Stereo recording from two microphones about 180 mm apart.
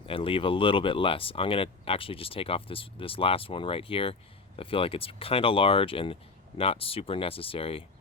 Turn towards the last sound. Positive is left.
turn(degrees=30)  # may be behind; listen again after turning